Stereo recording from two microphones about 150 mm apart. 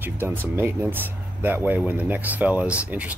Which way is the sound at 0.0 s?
15° right (ahead or behind).